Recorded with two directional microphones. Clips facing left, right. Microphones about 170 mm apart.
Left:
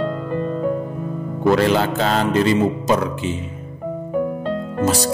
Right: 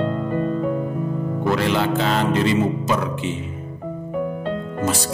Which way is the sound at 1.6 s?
40° left (ahead or behind).